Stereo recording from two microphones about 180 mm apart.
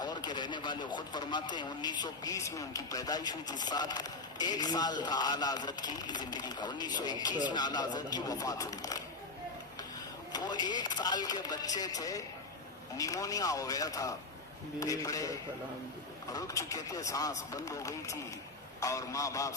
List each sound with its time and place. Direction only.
0.0 s speech: 25° left (ahead or behind)
10.3 s speech: 20° left (ahead or behind)